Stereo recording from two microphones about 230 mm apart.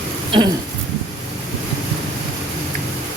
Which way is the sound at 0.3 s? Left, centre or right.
Right.